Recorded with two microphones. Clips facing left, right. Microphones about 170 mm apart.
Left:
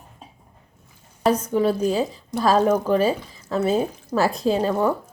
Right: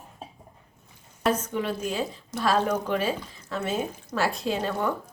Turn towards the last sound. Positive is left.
turn(degrees=40)  # may be behind; listen again after turning